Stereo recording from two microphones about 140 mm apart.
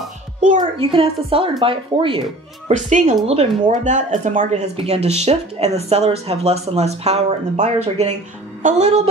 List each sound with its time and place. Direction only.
0.6 s a woman's voice: 40° right (ahead or behind)
2.7 s a woman's voice: 60° right (ahead or behind)